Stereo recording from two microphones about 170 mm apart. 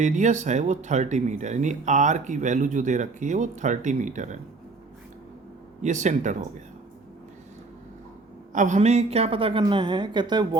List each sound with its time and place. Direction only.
0.0 s speech: 45° right (ahead or behind)
5.8 s speech: 45° right (ahead or behind)
8.5 s a woman's voice: 45° right (ahead or behind); by 10.6 s 25° right (ahead or behind)